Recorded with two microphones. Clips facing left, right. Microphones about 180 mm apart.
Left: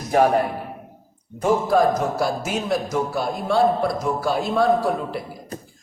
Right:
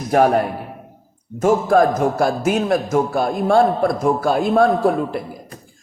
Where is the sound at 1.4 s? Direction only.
50° right (ahead or behind).